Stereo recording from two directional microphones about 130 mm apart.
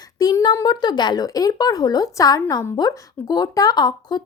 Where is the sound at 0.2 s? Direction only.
30° left (ahead or behind).